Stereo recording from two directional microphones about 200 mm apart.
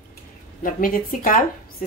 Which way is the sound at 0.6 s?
45° left (ahead or behind).